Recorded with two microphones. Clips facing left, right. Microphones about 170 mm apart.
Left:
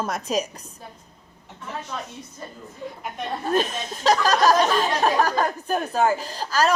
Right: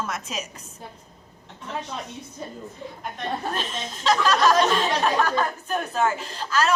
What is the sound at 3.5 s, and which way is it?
A woman's voice, 45° left (ahead or behind).